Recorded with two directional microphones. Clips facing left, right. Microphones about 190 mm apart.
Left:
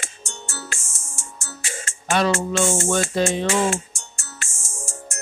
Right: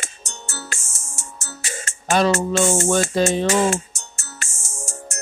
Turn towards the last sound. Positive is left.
turn(degrees=-40)  # may be behind; listen again after turning